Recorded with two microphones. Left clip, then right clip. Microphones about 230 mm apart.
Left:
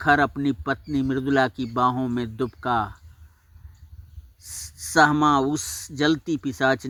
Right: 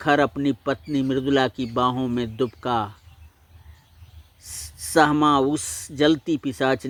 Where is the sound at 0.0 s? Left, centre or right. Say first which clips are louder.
Even; left.